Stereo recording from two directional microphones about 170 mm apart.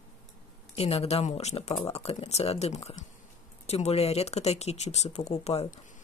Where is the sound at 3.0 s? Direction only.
50° left (ahead or behind).